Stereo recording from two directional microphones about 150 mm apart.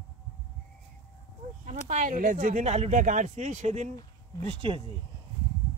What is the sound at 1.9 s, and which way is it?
Speech, 60° right (ahead or behind).